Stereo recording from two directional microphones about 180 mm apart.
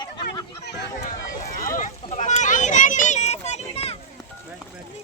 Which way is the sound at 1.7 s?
45° left (ahead or behind).